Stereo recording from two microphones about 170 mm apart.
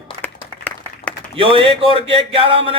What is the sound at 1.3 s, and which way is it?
Speech, 30° right (ahead or behind).